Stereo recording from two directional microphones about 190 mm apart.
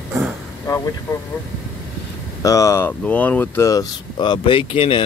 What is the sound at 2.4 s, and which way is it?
Speech, 15° left (ahead or behind).